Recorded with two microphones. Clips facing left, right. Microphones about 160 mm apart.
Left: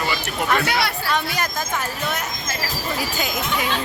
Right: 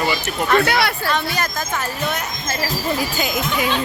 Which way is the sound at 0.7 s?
65° right (ahead or behind).